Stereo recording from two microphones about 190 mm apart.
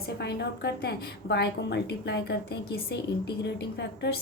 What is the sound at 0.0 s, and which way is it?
A woman's voice, 60° left (ahead or behind).